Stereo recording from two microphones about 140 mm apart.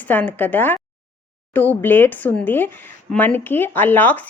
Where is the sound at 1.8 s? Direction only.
15° left (ahead or behind).